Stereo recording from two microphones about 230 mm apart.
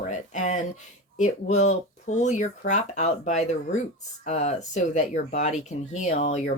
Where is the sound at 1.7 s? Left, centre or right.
Left.